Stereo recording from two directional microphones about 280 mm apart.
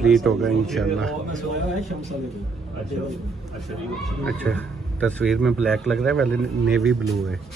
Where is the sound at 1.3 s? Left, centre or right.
Right.